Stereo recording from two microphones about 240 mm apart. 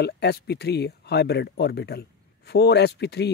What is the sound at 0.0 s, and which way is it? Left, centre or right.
Speech, left.